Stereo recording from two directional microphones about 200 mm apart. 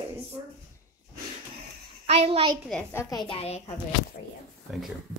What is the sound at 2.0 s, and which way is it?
Speech, 30° right (ahead or behind).